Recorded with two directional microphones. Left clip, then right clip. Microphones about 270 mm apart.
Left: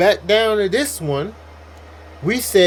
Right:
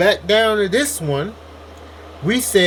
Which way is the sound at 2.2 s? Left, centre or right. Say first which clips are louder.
Left 1 dB; centre.